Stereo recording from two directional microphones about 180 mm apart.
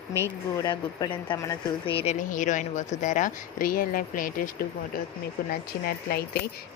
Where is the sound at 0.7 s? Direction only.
20° left (ahead or behind).